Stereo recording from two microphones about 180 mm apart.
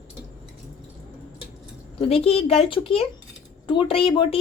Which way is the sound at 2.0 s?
30° left (ahead or behind).